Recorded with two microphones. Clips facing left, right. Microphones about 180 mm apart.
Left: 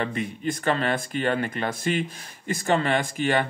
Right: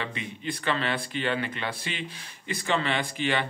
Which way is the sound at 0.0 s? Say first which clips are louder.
Left 7 dB; 50° left (ahead or behind).